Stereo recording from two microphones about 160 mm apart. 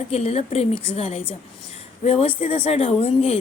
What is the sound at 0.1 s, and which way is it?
A woman's voice, 40° left (ahead or behind).